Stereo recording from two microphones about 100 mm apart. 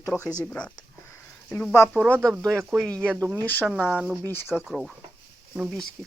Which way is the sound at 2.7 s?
15° right (ahead or behind).